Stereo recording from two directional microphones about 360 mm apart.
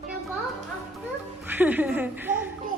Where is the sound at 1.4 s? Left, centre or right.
Centre.